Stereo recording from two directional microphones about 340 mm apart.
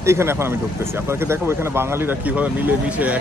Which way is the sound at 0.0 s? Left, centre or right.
Centre.